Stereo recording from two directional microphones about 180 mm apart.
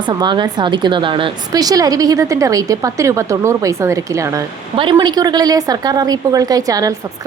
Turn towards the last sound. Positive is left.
turn(degrees=-20)  # may be behind; listen again after turning